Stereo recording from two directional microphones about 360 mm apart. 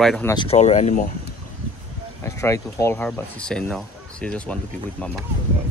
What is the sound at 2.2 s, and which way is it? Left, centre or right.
Speech, centre.